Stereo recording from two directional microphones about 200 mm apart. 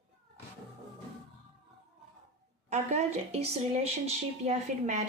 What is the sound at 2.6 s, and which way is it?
A woman's voice, 35° right (ahead or behind).